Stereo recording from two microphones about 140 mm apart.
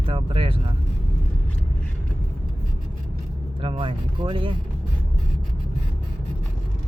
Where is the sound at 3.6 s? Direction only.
40° right (ahead or behind).